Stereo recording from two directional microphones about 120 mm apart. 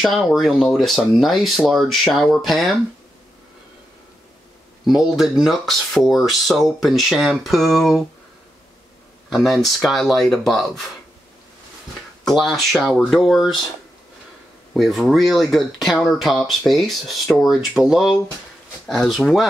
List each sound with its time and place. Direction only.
0.0 s speech: centre (ahead or behind)
4.8 s speech: centre (ahead or behind)
9.3 s speech: centre (ahead or behind)
12.3 s speech: centre (ahead or behind)
14.7 s speech: centre (ahead or behind)